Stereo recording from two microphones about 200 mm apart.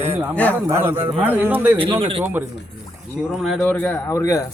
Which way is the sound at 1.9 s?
25° right (ahead or behind).